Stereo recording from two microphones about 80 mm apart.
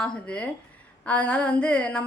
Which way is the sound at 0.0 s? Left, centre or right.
Centre.